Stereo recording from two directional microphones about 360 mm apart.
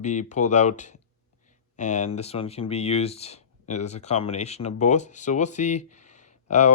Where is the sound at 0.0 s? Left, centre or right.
Centre.